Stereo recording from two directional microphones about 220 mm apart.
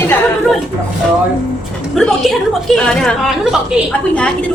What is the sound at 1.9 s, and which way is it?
A woman's voice, centre (ahead or behind).